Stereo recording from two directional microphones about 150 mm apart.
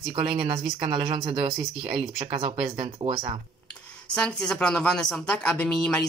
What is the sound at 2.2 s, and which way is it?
Speech, 35° right (ahead or behind).